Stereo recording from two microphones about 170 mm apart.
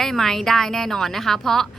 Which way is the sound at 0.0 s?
Centre (ahead or behind).